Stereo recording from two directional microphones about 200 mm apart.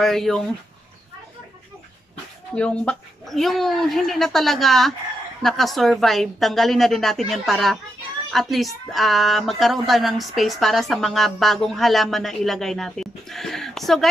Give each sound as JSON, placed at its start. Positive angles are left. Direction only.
{"t": 0.0, "sound": "speech", "side_deg": 0}
{"t": 2.5, "sound": "speech", "side_deg": 5}